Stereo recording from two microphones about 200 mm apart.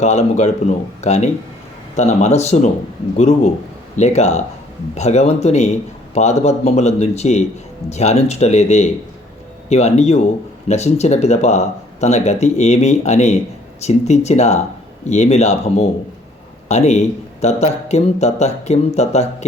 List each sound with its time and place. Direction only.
0.0 s a man's voice: 35° left (ahead or behind)